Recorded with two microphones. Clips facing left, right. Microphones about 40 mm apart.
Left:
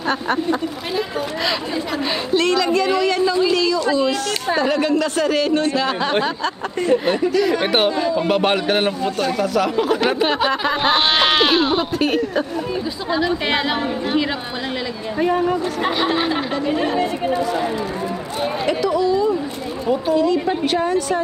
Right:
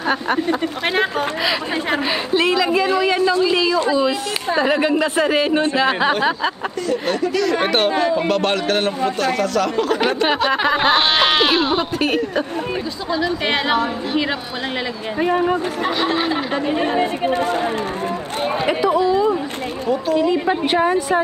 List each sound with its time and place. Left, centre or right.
0.0 s a woman's voice: centre
2.0 s a woman's voice: centre
7.1 s speech: centre
7.9 s speech: right
8.3 s speech: centre
10.5 s speech: centre
13.5 s speech: centre
15.1 s a woman's voice: centre
15.8 s speech: centre
16.6 s speech: right
17.3 s speech: right
18.4 s speech: right